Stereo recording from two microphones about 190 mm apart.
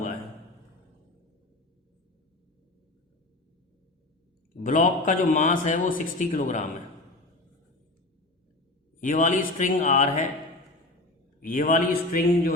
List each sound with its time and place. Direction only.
4.6 s a man's voice: 40° left (ahead or behind)
9.0 s a man's voice: 40° left (ahead or behind)
11.4 s a man's voice: 45° left (ahead or behind)